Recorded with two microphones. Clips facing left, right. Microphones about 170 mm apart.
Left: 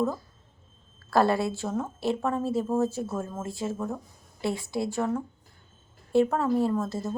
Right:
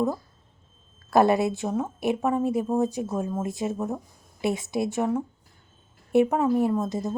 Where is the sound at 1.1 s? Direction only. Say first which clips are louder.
Right 3 dB; 20° right (ahead or behind).